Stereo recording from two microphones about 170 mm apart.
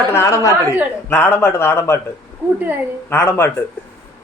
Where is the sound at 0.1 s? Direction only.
15° left (ahead or behind).